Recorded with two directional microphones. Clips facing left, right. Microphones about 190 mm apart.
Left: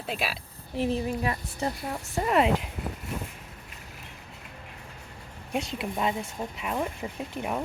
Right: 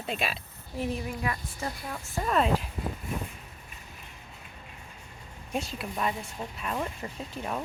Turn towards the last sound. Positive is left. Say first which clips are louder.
# left 3 dB
turn(degrees=15)  # may be behind; listen again after turning